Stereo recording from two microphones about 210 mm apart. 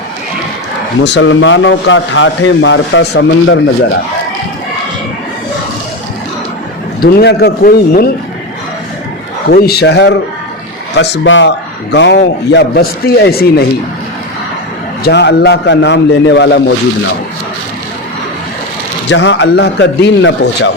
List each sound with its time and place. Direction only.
1.0 s a man's voice: 60° left (ahead or behind)
7.0 s a man's voice: 50° left (ahead or behind)
9.5 s a man's voice: 50° left (ahead or behind)
15.0 s a man's voice: 55° left (ahead or behind)
19.0 s a man's voice: 60° left (ahead or behind)